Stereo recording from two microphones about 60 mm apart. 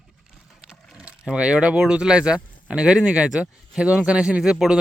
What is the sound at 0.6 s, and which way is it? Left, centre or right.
Speech, centre.